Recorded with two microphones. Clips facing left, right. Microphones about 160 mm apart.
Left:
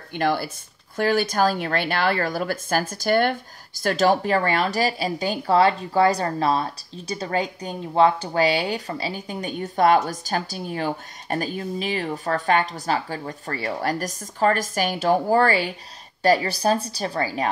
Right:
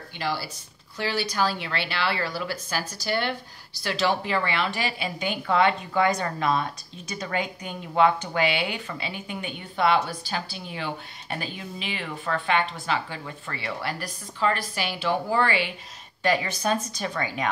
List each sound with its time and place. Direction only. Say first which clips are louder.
0.1 s speech: left 7 dB; 55° left (ahead or behind); by 17.5 s 35° left (ahead or behind)